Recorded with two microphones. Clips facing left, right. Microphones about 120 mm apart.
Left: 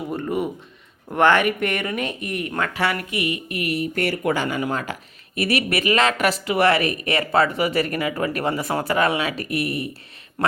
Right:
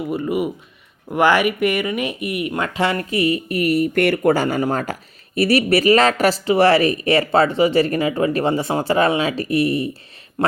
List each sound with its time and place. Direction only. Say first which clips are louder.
0.1 s speech: right 3 dB; 5° right (ahead or behind)
2.7 s speech: right 4 dB; 25° right (ahead or behind); by 3.8 s 40° right (ahead or behind)
3.9 s speech: right 7 dB; 60° right (ahead or behind)
4.2 s speech: right 6 dB; 40° right (ahead or behind)